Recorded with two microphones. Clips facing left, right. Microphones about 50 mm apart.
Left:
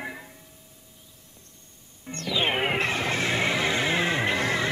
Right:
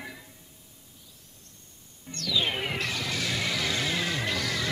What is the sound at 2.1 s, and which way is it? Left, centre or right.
Music, left.